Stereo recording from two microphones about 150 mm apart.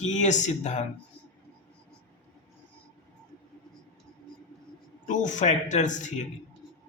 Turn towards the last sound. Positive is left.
turn(degrees=55)  # may be behind; listen again after turning